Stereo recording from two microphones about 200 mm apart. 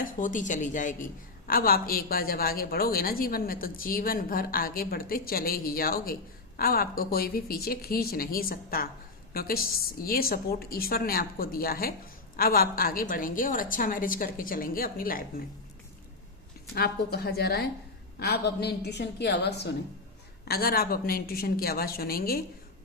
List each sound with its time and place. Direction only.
0.0 s a woman's voice: 40° left (ahead or behind)
16.7 s a woman's voice: 50° left (ahead or behind)